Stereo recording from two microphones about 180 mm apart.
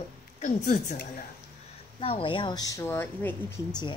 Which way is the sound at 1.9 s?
30° left (ahead or behind).